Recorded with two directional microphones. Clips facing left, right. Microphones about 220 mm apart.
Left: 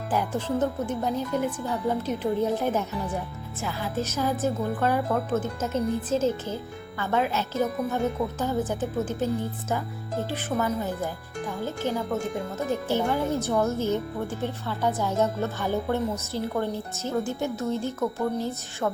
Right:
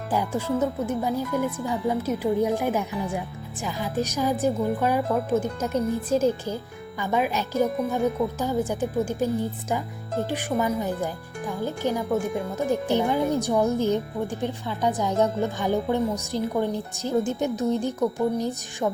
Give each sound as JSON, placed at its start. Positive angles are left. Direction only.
{"t": 0.1, "sound": "speech", "side_deg": -10}